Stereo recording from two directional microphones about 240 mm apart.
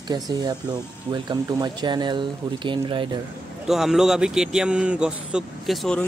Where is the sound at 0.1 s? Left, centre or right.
Centre.